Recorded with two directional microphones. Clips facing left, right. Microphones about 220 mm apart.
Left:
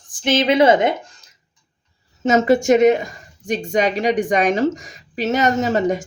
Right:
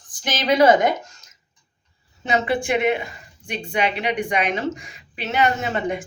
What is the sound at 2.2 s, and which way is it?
A woman's voice, 45° left (ahead or behind).